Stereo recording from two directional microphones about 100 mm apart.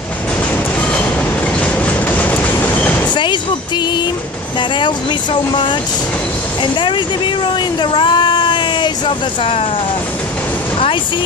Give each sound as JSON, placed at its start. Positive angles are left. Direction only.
{"t": 1.6, "sound": "train", "side_deg": 15}
{"t": 3.2, "sound": "music", "side_deg": 50}
{"t": 4.6, "sound": "speech", "side_deg": 50}